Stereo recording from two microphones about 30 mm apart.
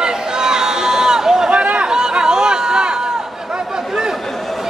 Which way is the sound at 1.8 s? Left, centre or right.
Right.